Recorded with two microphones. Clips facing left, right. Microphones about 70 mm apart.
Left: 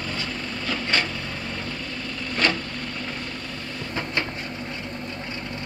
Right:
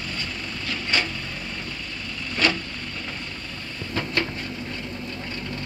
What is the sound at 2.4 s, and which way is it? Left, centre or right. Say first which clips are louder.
Vehicle: even; left.